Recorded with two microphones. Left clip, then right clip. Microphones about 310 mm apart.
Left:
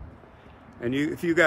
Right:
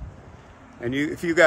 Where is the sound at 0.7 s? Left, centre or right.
Centre.